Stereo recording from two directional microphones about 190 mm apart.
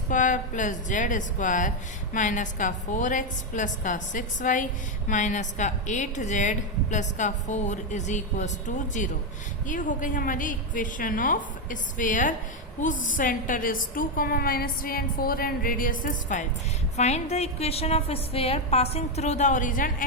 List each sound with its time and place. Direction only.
0.1 s a woman's voice: 40° left (ahead or behind)